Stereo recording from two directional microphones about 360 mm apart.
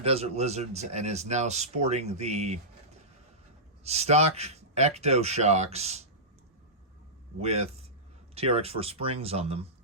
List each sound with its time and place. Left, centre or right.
0.0 s speech: centre
3.8 s speech: centre
7.3 s speech: centre